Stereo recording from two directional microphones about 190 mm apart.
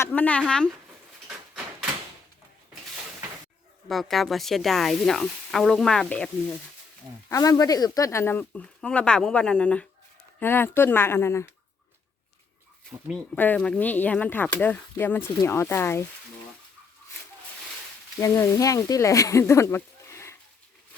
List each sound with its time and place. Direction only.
0.0 s speech: 10° left (ahead or behind)
1.3 s door: 5° right (ahead or behind)
3.8 s speech: centre (ahead or behind)
7.3 s speech: 15° left (ahead or behind)
12.9 s speech: 10° right (ahead or behind)
13.3 s speech: 10° left (ahead or behind)
18.2 s speech: 15° left (ahead or behind)